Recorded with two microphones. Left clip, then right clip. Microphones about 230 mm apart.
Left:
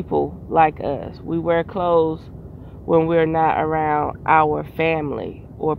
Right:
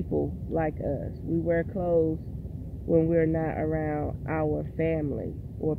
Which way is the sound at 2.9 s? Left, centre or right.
Left.